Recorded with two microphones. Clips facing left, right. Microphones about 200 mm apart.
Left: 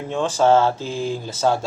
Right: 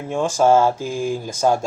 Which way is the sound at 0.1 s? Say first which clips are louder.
Right 1 dB; 10° right (ahead or behind).